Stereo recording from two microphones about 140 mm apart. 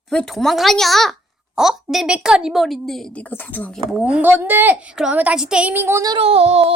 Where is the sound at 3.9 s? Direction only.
10° right (ahead or behind).